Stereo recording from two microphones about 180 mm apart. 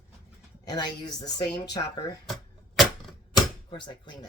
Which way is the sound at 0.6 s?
20° left (ahead or behind).